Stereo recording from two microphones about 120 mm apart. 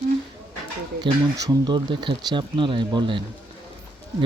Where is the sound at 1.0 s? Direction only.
30° right (ahead or behind).